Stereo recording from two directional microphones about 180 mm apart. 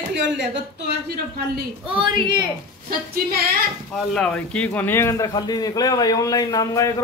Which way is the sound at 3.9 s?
5° left (ahead or behind).